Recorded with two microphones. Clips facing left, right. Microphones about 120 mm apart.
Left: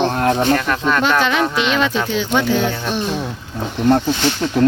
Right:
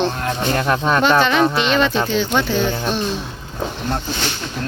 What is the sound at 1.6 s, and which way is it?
Speech, 5° left (ahead or behind).